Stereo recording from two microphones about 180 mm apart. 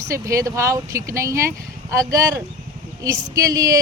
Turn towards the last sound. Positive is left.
turn(degrees=-20)  # may be behind; listen again after turning